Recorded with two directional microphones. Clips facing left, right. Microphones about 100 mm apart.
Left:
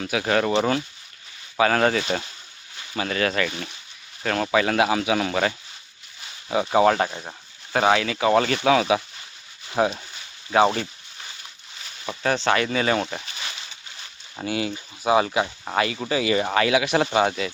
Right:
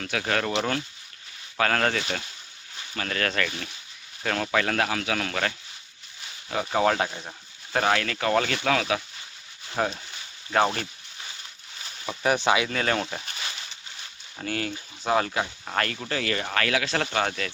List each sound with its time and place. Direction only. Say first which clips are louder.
0.0 s speech: left 5 dB; 10° left (ahead or behind)
12.2 s speech: left 1 dB; 10° right (ahead or behind)
12.6 s speech: left 4 dB; 5° left (ahead or behind)
14.4 s speech: left 4 dB; 10° left (ahead or behind)